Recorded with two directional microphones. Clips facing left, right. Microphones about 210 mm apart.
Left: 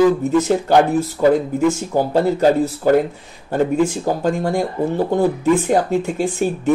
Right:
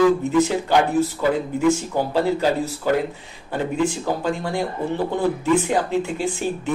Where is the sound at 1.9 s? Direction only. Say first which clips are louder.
Left 4 dB; 45° left (ahead or behind).